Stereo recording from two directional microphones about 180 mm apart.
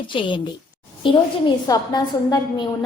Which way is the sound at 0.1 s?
25° left (ahead or behind).